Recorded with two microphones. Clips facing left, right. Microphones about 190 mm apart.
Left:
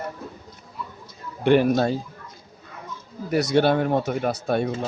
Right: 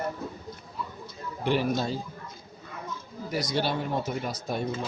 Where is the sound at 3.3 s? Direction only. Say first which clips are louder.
Left 9 dB; 60° left (ahead or behind).